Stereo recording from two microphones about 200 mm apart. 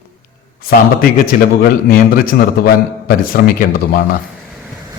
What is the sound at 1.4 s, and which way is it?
A man's voice, 50° left (ahead or behind).